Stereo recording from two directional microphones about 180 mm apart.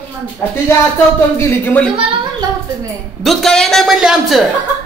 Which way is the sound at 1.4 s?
10° left (ahead or behind).